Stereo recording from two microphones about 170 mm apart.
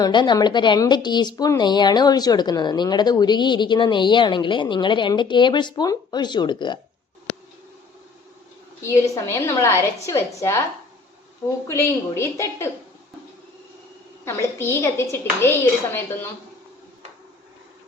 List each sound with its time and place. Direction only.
0.0 s speech: 25° left (ahead or behind)
8.8 s a woman's voice: 15° left (ahead or behind)
11.7 s a woman's voice: 15° left (ahead or behind)
14.3 s a woman's voice: 15° left (ahead or behind)